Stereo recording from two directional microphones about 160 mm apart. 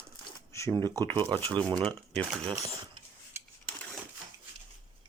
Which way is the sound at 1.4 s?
30° right (ahead or behind).